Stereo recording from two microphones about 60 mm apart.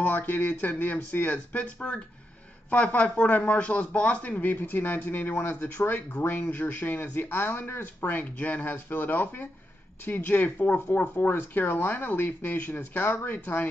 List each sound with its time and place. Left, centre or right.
0.0 s a man's voice: left